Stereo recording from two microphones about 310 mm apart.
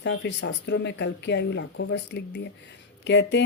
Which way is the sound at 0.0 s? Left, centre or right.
Left.